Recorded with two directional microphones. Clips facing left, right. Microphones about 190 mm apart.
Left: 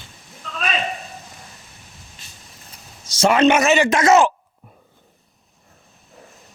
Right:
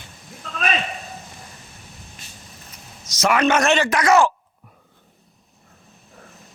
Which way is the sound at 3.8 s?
25° left (ahead or behind).